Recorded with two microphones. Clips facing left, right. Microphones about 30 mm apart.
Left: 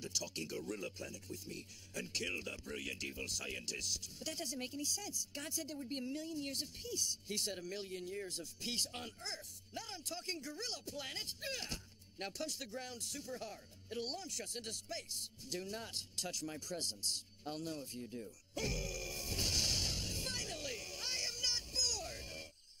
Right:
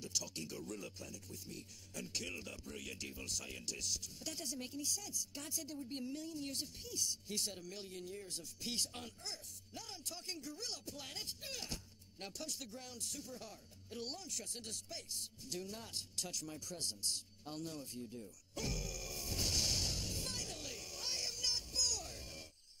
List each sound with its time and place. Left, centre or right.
0.0 s speech: left
10.4 s speech: left
18.0 s music: left